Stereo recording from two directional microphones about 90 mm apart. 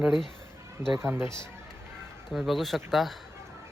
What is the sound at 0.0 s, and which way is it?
Speech, centre (ahead or behind).